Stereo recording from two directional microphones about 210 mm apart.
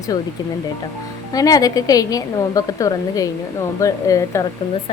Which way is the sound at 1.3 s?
15° left (ahead or behind).